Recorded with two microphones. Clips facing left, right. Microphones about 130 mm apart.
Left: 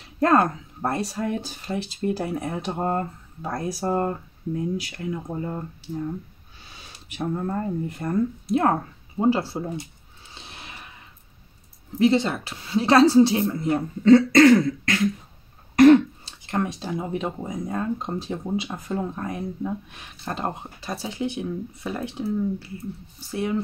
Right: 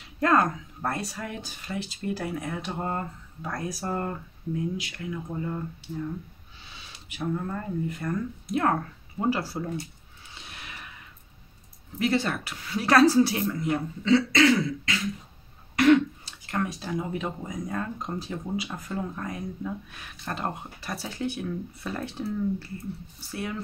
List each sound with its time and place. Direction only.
0.2 s speech: 30° left (ahead or behind)
7.2 s speech: 30° left (ahead or behind)
10.3 s a sound: 30° left (ahead or behind)
12.0 s speech: 20° left (ahead or behind)
14.0 s throat clearing: 50° left (ahead or behind)
16.3 s speech: 25° left (ahead or behind)